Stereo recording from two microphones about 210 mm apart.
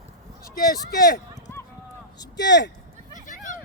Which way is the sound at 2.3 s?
55° left (ahead or behind).